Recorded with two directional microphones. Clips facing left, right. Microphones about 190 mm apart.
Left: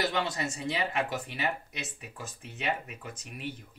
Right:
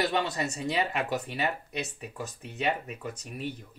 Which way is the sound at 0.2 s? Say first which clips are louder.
Right 2 dB; 40° right (ahead or behind).